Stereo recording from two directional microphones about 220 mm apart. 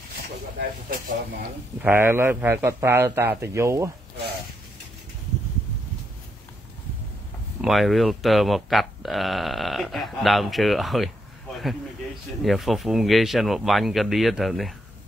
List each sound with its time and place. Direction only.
0.6 s speech: 40° right (ahead or behind)
1.8 s a man's voice: 10° right (ahead or behind)
7.6 s speech: centre (ahead or behind)
12.4 s speech: centre (ahead or behind)